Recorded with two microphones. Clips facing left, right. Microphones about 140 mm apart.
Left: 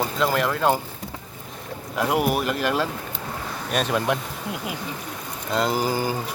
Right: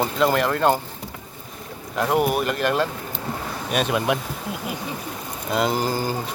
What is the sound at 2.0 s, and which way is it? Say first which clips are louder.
Speech: right 1 dB; 5° left (ahead or behind).